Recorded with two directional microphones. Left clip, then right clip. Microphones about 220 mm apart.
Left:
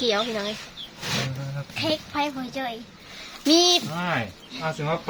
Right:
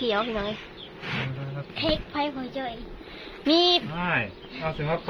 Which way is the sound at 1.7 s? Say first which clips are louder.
Left 1 dB; 10° right (ahead or behind).